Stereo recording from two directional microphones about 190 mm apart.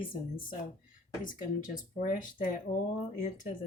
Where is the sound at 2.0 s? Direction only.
45° left (ahead or behind).